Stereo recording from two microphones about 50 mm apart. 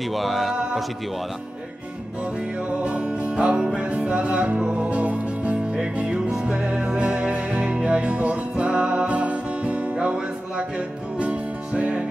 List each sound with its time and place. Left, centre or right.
0.1 s speech: centre
2.8 s music: right
11.1 s music: right